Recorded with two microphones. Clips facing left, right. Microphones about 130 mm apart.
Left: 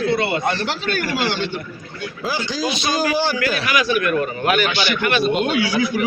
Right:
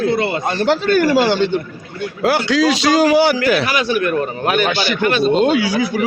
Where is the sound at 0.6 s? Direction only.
50° right (ahead or behind).